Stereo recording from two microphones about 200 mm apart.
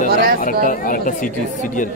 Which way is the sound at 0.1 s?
45° right (ahead or behind).